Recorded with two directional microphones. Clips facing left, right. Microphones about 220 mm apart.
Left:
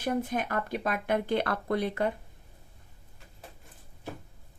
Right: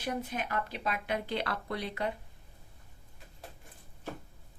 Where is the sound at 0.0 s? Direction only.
50° left (ahead or behind).